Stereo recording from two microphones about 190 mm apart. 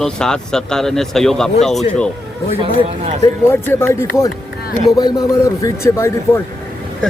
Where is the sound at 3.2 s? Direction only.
15° left (ahead or behind).